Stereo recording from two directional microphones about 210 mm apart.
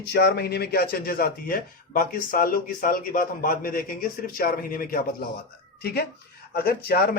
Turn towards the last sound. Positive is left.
turn(degrees=45)  # may be behind; listen again after turning